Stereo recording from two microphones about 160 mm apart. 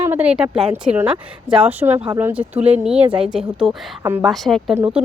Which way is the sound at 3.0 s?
30° right (ahead or behind).